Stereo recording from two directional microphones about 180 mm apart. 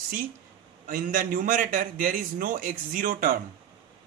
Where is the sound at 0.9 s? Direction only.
50° right (ahead or behind).